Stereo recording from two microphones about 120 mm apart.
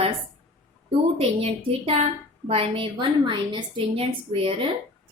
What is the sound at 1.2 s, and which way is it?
A woman's voice, 55° right (ahead or behind).